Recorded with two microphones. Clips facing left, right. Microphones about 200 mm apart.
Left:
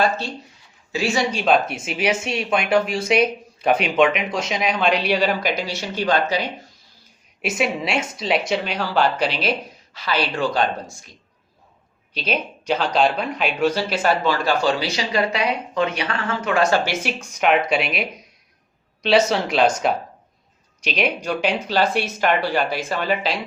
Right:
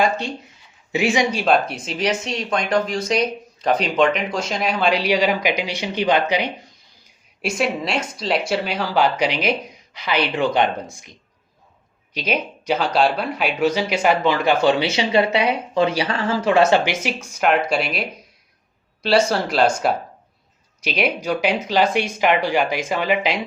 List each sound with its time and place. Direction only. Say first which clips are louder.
0.0 s speech: right 1 dB; 15° right (ahead or behind)
7.4 s speech: right 1 dB; centre (ahead or behind); by 10.7 s 20° right (ahead or behind)
12.1 s speech: right 1 dB; 10° right (ahead or behind)
16.9 s speech: right 1 dB; 10° right (ahead or behind)
19.0 s speech: even; centre (ahead or behind)
21.2 s speech: right 2 dB; 10° right (ahead or behind)